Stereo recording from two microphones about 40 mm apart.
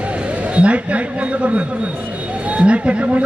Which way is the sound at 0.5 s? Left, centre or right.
Right.